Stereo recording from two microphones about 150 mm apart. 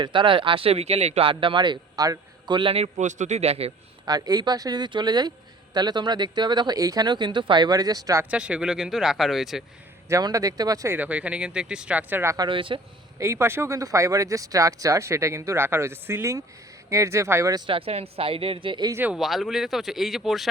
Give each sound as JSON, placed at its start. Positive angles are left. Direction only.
{"t": 0.0, "sound": "speech", "side_deg": -35}
{"t": 4.0, "sound": "speech", "side_deg": -25}
{"t": 8.2, "sound": "speech", "side_deg": -10}
{"t": 10.1, "sound": "speech", "side_deg": -25}
{"t": 12.5, "sound": "speech", "side_deg": -35}
{"t": 13.1, "sound": "speech", "side_deg": -20}
{"t": 17.7, "sound": "speech", "side_deg": -40}
{"t": 18.9, "sound": "speech", "side_deg": -15}
{"t": 19.1, "sound": "speech", "side_deg": 0}